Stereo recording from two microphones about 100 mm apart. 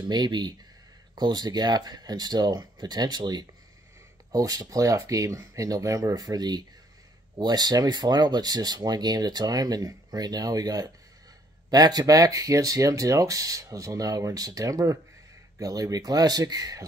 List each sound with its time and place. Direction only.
0.1 s speech: 45° right (ahead or behind)